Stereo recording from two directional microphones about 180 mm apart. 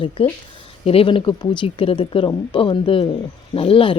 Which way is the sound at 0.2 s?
30° left (ahead or behind).